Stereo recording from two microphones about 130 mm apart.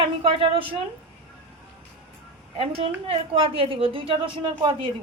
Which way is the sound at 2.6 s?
45° right (ahead or behind).